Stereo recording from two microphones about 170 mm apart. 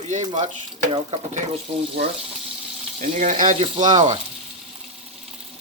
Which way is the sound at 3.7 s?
30° right (ahead or behind).